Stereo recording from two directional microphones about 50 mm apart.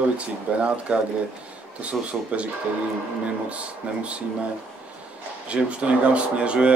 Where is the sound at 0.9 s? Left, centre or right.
Right.